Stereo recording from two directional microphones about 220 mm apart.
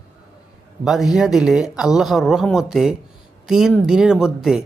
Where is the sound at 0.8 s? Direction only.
Centre (ahead or behind).